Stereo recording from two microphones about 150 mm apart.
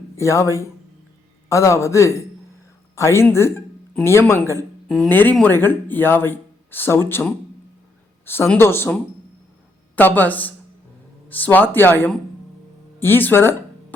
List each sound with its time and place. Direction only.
0.2 s a woman's voice: 20° left (ahead or behind)